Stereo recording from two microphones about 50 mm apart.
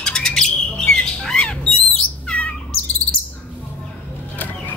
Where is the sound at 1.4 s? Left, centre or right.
Centre.